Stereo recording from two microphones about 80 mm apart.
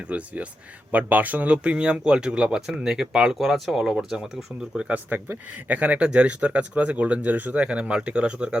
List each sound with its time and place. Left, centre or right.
0.1 s speech: centre
4.9 s speech: right